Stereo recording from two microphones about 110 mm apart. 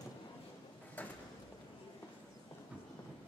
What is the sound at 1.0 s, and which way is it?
Sliding door, 15° left (ahead or behind).